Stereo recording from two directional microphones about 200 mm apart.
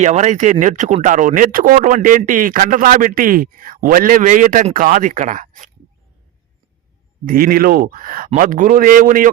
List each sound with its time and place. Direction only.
0.0 s speech: 35° right (ahead or behind)
7.3 s speech: 45° right (ahead or behind)